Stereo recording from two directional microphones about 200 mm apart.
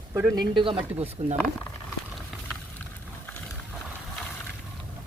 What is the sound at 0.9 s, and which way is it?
Speech, 30° right (ahead or behind).